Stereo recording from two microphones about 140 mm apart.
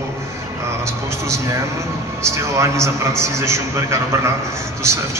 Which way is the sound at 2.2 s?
20° right (ahead or behind).